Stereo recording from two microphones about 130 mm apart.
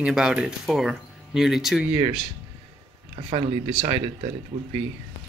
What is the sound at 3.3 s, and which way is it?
Speech, 50° right (ahead or behind).